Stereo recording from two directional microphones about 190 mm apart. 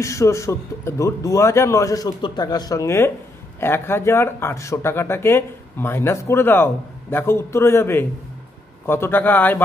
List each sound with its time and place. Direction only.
0.0 s speech: 15° left (ahead or behind)